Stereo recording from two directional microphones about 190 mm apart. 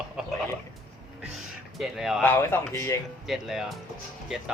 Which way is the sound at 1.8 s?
Centre (ahead or behind).